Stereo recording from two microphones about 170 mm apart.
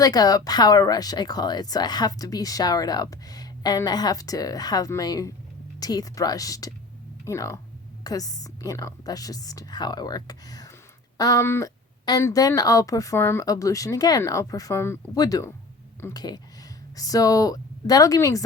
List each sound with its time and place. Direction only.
0.0 s speech: 20° left (ahead or behind)